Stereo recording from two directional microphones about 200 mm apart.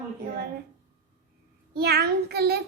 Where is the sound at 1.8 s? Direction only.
55° right (ahead or behind).